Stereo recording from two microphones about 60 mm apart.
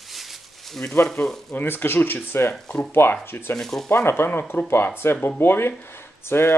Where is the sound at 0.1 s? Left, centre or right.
Centre.